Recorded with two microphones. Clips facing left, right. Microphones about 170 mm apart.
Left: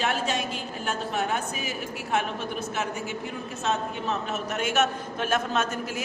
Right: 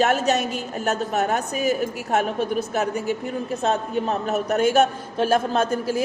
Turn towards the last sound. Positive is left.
turn(degrees=-35)  # may be behind; listen again after turning